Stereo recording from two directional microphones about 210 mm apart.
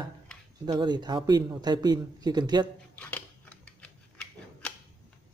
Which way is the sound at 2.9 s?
5° left (ahead or behind).